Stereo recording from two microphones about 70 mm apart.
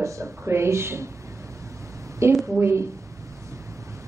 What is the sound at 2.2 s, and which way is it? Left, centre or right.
Speech, right.